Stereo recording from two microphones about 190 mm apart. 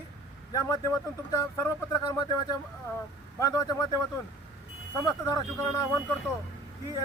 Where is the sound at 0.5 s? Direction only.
20° left (ahead or behind).